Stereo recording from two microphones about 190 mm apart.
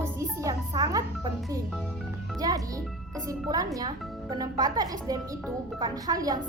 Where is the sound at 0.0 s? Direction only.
15° right (ahead or behind).